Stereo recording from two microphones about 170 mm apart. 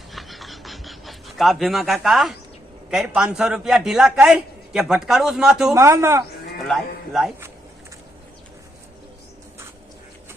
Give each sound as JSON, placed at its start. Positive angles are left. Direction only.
{"t": 0.1, "sound": "a sound", "side_deg": 0}
{"t": 2.9, "sound": "a man's voice", "side_deg": -5}
{"t": 5.7, "sound": "a man's voice", "side_deg": -20}
{"t": 6.6, "sound": "a man's voice", "side_deg": 0}